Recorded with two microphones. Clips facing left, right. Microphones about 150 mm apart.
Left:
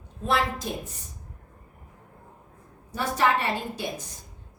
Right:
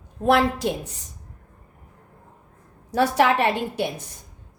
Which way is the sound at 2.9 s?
80° right.